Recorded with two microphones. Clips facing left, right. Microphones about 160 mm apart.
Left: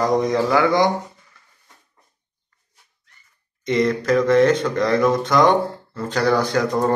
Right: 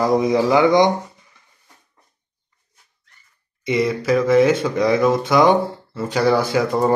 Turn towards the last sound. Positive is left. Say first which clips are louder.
# right 1 dB
turn(degrees=-5)  # may be behind; listen again after turning